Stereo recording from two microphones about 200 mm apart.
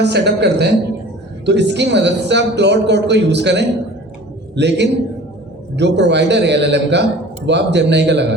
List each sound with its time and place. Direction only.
0.0 s a man's voice: 55° right (ahead or behind)